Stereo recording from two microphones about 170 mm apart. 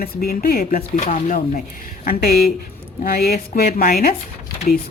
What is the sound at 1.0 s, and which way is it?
Speech, 45° left (ahead or behind).